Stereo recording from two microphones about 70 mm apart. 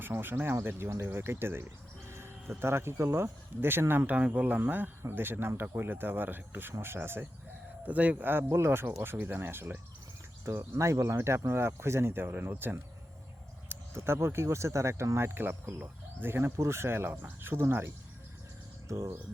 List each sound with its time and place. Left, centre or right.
0.0 s speech: right
2.0 s a sound: right
2.6 s speech: right
7.9 s speech: right